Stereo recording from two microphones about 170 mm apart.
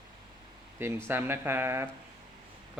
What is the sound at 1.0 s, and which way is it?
Speech, 15° right (ahead or behind).